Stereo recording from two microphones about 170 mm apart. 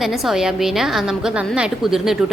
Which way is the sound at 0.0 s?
Centre (ahead or behind).